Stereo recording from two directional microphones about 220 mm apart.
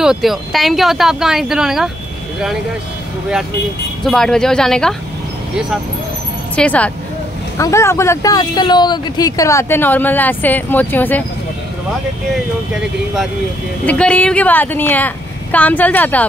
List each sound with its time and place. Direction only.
0.0 s speech: centre (ahead or behind)
4.0 s speech: centre (ahead or behind)
6.5 s speech: 5° left (ahead or behind)
13.8 s speech: 5° left (ahead or behind)